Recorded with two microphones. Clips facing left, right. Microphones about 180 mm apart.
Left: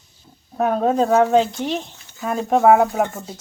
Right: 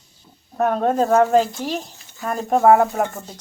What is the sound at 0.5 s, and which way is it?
Speech, centre (ahead or behind).